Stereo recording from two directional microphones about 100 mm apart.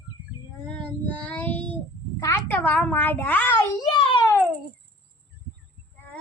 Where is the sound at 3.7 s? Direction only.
50° left (ahead or behind).